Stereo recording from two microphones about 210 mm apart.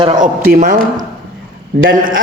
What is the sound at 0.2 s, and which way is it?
Speech, 40° right (ahead or behind).